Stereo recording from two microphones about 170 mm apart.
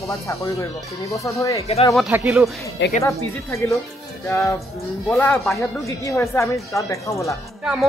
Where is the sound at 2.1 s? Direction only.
10° right (ahead or behind).